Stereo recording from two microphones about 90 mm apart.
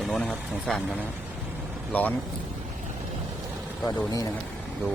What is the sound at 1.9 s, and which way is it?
Speech, 15° left (ahead or behind).